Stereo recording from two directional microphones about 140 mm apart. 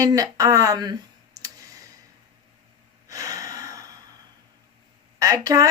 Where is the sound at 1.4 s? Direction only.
25° right (ahead or behind).